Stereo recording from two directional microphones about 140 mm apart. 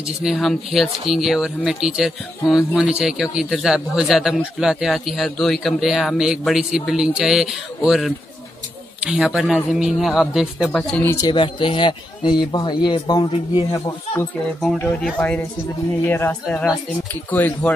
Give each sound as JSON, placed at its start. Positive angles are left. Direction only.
{"t": 0.0, "sound": "speech", "side_deg": 0}
{"t": 11.1, "sound": "speech", "side_deg": 25}
{"t": 14.6, "sound": "speech", "side_deg": 0}
{"t": 16.4, "sound": "speech", "side_deg": 5}